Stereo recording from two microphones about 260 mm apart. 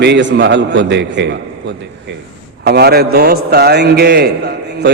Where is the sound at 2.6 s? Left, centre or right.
Right.